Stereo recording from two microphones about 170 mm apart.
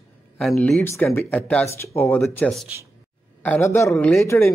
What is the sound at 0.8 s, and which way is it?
Speech, 15° left (ahead or behind).